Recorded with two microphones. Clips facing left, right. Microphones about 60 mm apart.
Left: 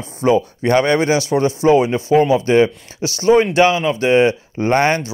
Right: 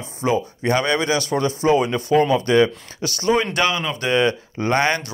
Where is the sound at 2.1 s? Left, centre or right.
Centre.